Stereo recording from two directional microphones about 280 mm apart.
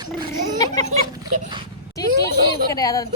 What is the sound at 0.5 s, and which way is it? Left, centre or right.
Speech, centre.